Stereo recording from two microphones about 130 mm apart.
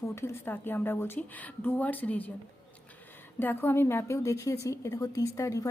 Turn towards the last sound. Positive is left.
turn(degrees=25)  # may be behind; listen again after turning